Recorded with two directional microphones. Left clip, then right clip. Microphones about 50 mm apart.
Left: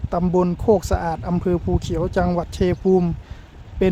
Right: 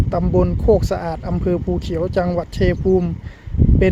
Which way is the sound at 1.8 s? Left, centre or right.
Left.